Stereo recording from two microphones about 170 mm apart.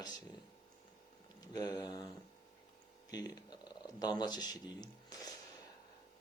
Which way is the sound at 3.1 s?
25° left (ahead or behind).